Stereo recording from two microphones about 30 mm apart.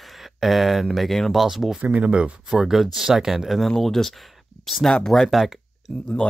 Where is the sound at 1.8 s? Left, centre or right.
Right.